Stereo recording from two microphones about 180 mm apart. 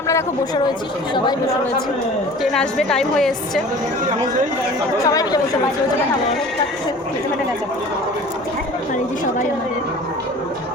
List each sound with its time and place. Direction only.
1.1 s speech: 25° left (ahead or behind)
2.4 s a woman's voice: centre (ahead or behind)
5.0 s speech: 20° left (ahead or behind)